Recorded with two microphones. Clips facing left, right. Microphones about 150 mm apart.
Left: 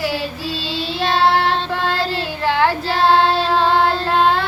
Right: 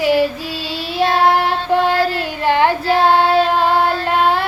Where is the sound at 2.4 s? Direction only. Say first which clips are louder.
Right 3 dB; 15° right (ahead or behind).